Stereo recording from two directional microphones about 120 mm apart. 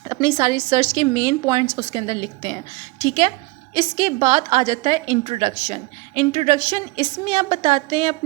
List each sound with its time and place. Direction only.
0.1 s a woman's voice: 30° right (ahead or behind)
1.9 s a woman's voice: 50° right (ahead or behind)
3.8 s a woman's voice: 40° right (ahead or behind)